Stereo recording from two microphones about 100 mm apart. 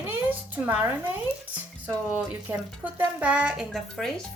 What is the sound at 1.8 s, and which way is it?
A woman's voice, 15° right (ahead or behind).